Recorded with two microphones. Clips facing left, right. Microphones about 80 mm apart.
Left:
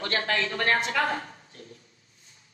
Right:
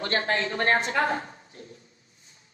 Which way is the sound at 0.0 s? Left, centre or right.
Right.